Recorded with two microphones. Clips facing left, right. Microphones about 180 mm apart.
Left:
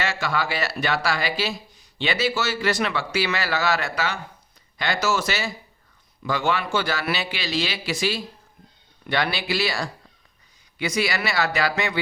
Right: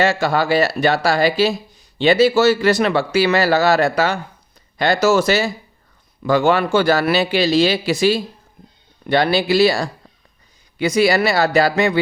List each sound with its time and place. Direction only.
0.0 s a man's voice: 35° right (ahead or behind)